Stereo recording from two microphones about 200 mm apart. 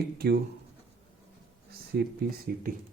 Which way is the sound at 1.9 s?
55° right (ahead or behind).